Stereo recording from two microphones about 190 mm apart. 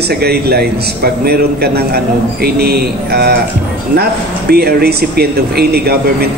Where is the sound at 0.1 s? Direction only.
55° right (ahead or behind).